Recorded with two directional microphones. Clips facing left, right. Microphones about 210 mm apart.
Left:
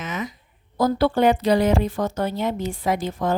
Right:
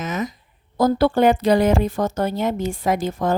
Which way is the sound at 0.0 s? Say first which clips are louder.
Right 4 dB; 40° right (ahead or behind).